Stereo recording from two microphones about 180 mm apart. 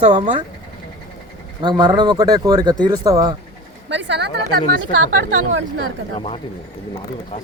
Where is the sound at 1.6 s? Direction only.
25° right (ahead or behind).